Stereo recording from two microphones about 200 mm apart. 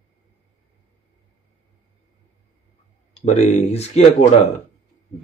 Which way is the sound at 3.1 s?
35° left (ahead or behind).